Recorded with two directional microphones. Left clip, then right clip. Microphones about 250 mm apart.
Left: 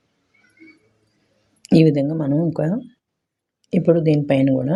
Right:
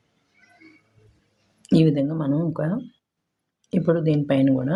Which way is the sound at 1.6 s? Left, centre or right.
Centre.